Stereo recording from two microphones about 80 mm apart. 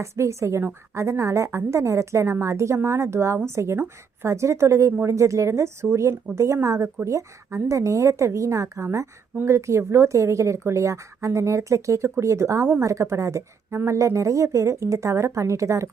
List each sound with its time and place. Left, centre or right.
0.0 s a woman's voice: right